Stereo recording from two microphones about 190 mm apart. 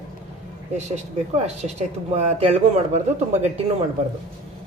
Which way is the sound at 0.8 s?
35° right (ahead or behind).